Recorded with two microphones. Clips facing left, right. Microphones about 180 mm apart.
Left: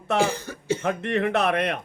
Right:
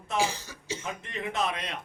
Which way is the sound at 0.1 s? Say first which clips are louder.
Left 6 dB; 55° left (ahead or behind).